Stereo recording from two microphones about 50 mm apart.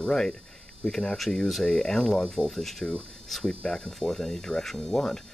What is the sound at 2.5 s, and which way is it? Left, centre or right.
Speech, centre.